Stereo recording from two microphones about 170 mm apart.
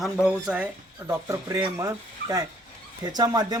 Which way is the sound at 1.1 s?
15° right (ahead or behind).